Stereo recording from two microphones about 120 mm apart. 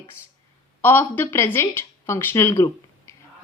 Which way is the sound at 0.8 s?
20° left (ahead or behind).